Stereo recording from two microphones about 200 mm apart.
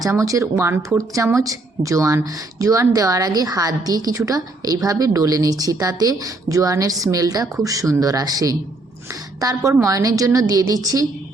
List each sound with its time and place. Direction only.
0.0 s speech: 15° right (ahead or behind)